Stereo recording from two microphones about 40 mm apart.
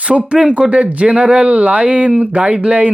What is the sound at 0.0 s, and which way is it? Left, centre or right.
Speech, right.